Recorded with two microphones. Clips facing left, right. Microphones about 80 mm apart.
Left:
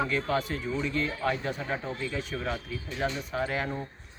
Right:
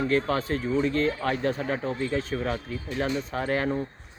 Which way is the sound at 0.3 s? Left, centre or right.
Right.